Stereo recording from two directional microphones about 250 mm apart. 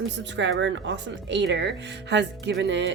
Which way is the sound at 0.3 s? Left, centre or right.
Right.